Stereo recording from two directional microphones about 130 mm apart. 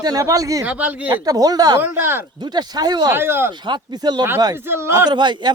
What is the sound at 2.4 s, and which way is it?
Speech, 35° right (ahead or behind).